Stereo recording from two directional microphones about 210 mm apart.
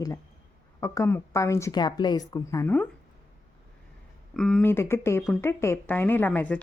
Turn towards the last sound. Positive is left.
turn(degrees=5)  # may be behind; listen again after turning